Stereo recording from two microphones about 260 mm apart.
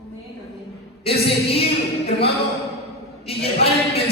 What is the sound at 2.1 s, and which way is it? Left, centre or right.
Speech, left.